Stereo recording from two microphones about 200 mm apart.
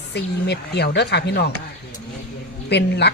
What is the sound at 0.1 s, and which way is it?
Speech, 55° left (ahead or behind).